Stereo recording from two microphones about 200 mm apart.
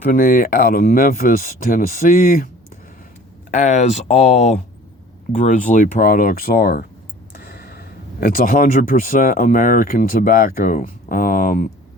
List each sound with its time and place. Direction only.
0.1 s speech: 45° left (ahead or behind)
3.6 s speech: 35° left (ahead or behind)